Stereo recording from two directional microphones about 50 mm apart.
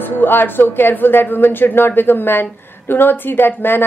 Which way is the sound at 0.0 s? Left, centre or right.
Left.